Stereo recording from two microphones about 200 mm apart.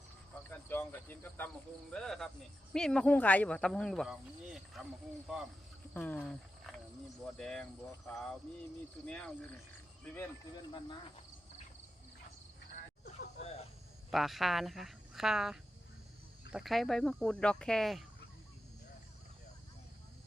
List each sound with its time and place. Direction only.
0.5 s cricket: 10° left (ahead or behind)
1.9 s speech: centre (ahead or behind)
5.9 s cricket: 10° left (ahead or behind)
7.3 s speech: 5° left (ahead or behind)
13.4 s a sound: 30° left (ahead or behind)
14.1 s speech: centre (ahead or behind)